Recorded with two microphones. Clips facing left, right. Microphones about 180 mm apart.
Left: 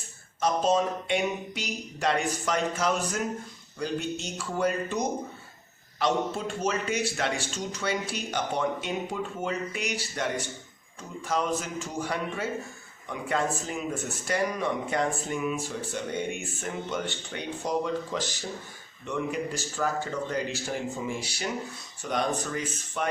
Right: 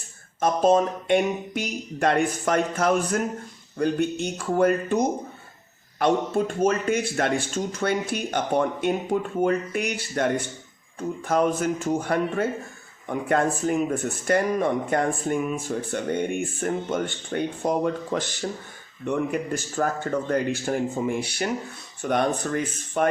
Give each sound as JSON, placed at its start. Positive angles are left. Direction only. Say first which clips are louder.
{"t": 0.3, "sound": "speech", "louder": "right 5 dB", "side_deg": -55}